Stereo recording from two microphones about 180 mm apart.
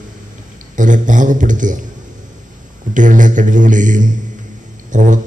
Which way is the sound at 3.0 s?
45° right (ahead or behind).